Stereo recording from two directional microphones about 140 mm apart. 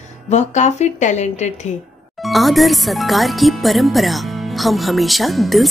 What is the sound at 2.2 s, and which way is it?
Speech, centre (ahead or behind).